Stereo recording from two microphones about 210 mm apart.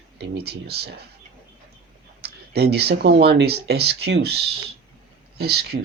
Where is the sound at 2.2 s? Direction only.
50° right (ahead or behind).